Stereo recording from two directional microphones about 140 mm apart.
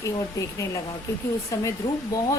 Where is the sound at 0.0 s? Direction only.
20° left (ahead or behind).